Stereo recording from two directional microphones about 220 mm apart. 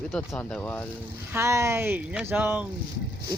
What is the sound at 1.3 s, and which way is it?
Speech, 10° right (ahead or behind).